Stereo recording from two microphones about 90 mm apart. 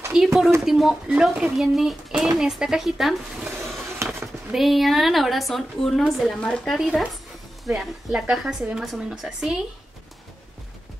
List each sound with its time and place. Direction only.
0.1 s a woman's voice: 5° right (ahead or behind)
4.0 s a sound: 30° right (ahead or behind)
4.5 s a woman's voice: centre (ahead or behind)